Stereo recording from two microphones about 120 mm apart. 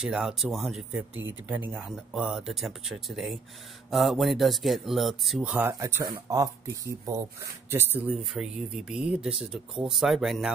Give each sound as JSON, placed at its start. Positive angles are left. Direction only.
{"t": 0.0, "sound": "speech", "side_deg": -5}
{"t": 5.7, "sound": "speech", "side_deg": -25}
{"t": 8.2, "sound": "speech", "side_deg": 0}